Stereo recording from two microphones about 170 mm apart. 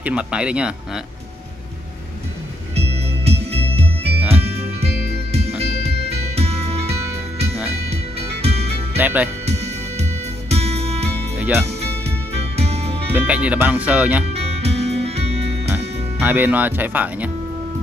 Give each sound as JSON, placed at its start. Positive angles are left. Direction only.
{"t": 0.0, "sound": "speech", "side_deg": -5}
{"t": 2.7, "sound": "music", "side_deg": -35}
{"t": 8.9, "sound": "speech", "side_deg": -10}
{"t": 10.5, "sound": "music", "side_deg": -40}
{"t": 11.3, "sound": "music", "side_deg": -10}
{"t": 12.4, "sound": "music", "side_deg": -40}
{"t": 13.1, "sound": "speech", "side_deg": -10}
{"t": 14.3, "sound": "music", "side_deg": -35}
{"t": 15.7, "sound": "speech", "side_deg": -10}